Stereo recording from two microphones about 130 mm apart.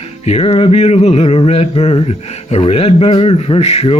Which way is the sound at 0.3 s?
55° left (ahead or behind).